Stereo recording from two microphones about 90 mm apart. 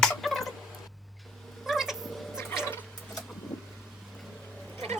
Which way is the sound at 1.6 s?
5° right (ahead or behind).